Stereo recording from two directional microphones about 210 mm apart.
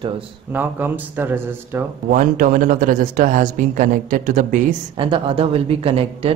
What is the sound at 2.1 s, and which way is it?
Speech, 40° right (ahead or behind).